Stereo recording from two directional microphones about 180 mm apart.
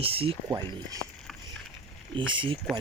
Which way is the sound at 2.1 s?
30° right (ahead or behind).